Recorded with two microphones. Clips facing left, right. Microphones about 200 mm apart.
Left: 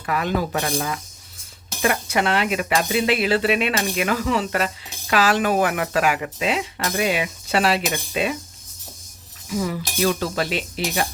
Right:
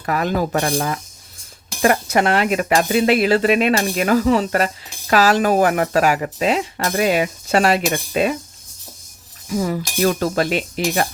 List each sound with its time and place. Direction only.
0.0 s speech: 40° right (ahead or behind)
9.5 s speech: 45° right (ahead or behind)